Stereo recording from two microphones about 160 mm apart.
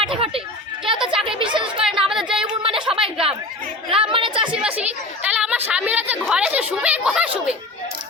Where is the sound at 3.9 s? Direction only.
35° right (ahead or behind).